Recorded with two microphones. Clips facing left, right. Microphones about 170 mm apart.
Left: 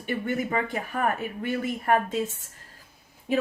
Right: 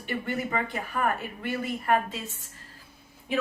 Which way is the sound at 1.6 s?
45° left (ahead or behind).